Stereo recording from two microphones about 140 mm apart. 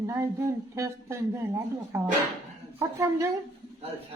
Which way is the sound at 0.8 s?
20° right (ahead or behind).